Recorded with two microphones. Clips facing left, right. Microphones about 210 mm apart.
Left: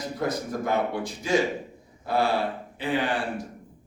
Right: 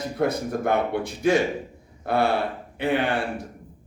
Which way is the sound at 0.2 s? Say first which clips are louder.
Right 5 dB; 60° right (ahead or behind).